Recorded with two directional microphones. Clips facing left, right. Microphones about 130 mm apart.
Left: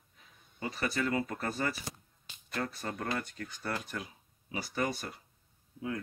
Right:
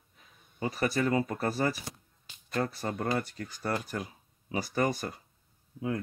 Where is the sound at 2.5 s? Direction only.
35° right (ahead or behind).